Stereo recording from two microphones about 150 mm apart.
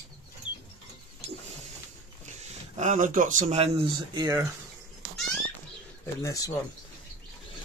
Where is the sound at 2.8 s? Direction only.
55° right (ahead or behind).